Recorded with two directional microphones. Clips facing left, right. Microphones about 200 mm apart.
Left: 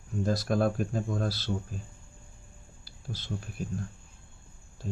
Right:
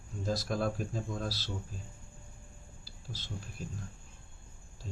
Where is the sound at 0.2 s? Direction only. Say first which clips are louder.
Left 6 dB; 60° left (ahead or behind).